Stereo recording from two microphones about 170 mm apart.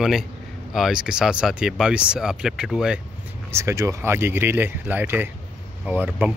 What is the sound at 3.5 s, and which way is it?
Speech, 15° right (ahead or behind).